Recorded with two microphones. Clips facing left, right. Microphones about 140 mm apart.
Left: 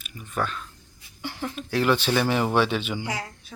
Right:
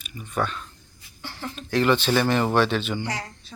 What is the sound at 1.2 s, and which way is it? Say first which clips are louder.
A woman's voice: left 3 dB; 15° left (ahead or behind).